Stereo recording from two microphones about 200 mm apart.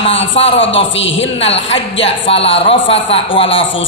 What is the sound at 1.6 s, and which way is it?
A woman's voice, 65° left (ahead or behind).